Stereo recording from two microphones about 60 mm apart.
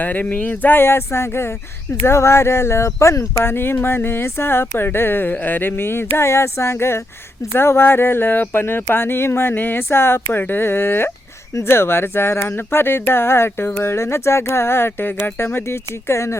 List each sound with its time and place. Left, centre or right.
0.0 s speech: left